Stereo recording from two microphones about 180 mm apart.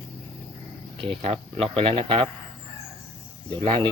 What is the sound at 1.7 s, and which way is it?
Speech, 30° right (ahead or behind).